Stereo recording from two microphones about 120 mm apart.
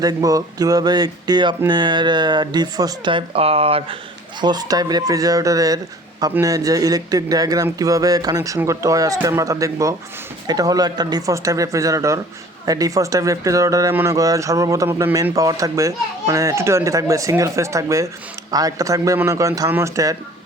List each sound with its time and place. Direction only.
0.0 s speech: 30° right (ahead or behind); by 3.9 s 50° right (ahead or behind)
4.4 s a man's voice: 35° right (ahead or behind); by 15.1 s 15° right (ahead or behind)
15.1 s speech: 30° right (ahead or behind)